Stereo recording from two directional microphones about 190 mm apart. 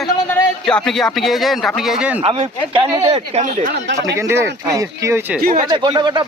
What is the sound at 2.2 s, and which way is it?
Speech, 30° right (ahead or behind).